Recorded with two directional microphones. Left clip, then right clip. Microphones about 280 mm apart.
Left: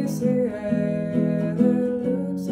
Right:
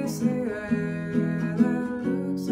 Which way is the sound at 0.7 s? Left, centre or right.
Centre.